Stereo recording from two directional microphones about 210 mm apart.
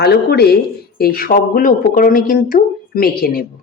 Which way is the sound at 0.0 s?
50° left (ahead or behind).